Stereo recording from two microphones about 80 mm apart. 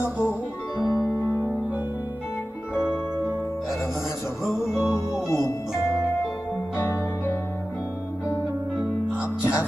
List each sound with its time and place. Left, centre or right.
0.0 s music: left
0.8 s music: left
2.7 s music: centre
4.9 s music: left
9.1 s music: centre